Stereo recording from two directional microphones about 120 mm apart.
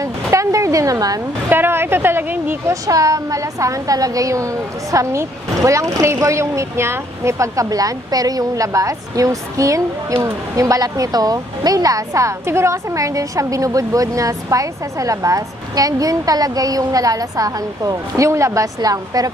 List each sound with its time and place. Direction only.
0.0 s speech: 25° right (ahead or behind)
1.5 s a woman's voice: 20° right (ahead or behind)
2.9 s a woman's voice: 30° right (ahead or behind)